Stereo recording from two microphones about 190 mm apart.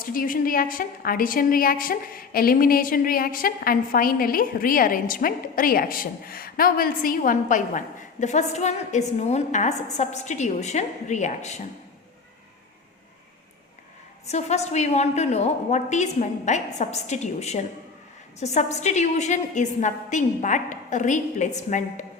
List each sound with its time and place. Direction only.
0.0 s a woman's voice: 45° left (ahead or behind)
14.3 s a woman's voice: 35° left (ahead or behind)